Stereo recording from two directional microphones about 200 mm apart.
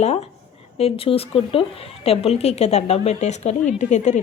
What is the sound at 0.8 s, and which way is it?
A woman's voice, 30° left (ahead or behind).